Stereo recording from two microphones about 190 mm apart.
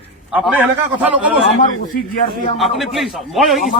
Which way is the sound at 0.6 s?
10° right (ahead or behind).